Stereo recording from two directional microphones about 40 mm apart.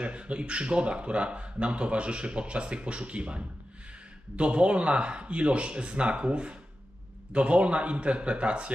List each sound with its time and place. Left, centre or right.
0.0 s a man's voice: right